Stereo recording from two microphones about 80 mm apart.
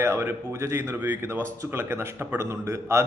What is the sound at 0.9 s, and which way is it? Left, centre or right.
Speech, right.